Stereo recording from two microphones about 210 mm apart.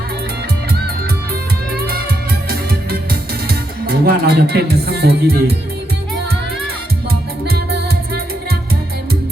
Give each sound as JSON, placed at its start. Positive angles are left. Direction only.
{"t": 1.7, "sound": "music", "side_deg": -45}
{"t": 7.4, "sound": "music", "side_deg": -45}